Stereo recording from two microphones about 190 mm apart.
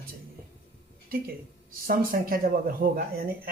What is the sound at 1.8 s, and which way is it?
Speech, 50° right (ahead or behind).